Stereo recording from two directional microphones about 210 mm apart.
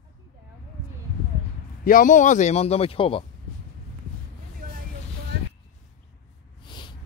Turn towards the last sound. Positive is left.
turn(degrees=20)  # may be behind; listen again after turning